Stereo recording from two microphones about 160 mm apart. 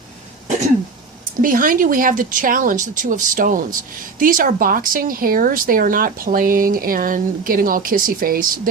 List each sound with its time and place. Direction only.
1.4 s speech: 60° right (ahead or behind)